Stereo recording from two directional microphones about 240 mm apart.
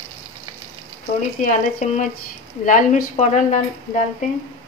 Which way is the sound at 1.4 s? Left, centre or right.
Left.